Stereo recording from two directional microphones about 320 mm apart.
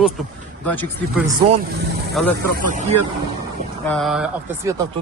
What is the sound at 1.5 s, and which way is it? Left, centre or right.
Speech, right.